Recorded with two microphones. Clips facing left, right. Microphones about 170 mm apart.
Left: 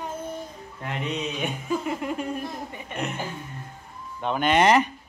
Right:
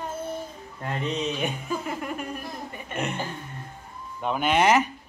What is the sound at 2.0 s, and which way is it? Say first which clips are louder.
Laughter: left 3 dB; 25° left (ahead or behind).